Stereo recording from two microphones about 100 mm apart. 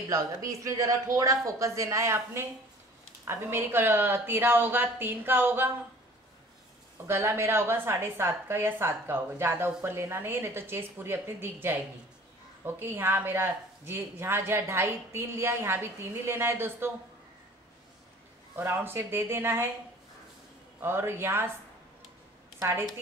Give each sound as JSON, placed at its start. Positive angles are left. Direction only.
{"t": 0.1, "sound": "speech", "side_deg": -35}
{"t": 7.1, "sound": "speech", "side_deg": -25}
{"t": 18.6, "sound": "speech", "side_deg": -20}
{"t": 20.8, "sound": "speech", "side_deg": -25}
{"t": 22.6, "sound": "a woman's voice", "side_deg": -25}